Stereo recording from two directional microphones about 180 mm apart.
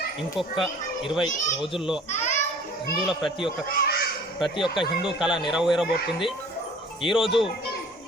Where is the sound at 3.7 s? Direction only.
55° left (ahead or behind).